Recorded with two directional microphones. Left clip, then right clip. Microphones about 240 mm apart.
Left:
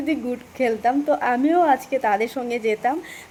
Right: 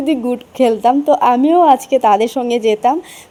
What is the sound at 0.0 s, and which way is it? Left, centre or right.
Speech, right.